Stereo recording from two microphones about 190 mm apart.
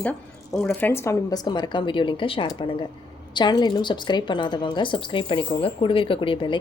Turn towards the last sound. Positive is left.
turn(degrees=25)  # may be behind; listen again after turning